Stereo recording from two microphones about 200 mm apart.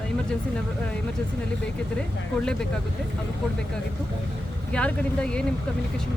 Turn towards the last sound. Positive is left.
turn(degrees=5)  # may be behind; listen again after turning